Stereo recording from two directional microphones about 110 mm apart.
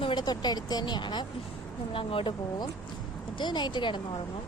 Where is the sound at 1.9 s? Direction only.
55° left (ahead or behind).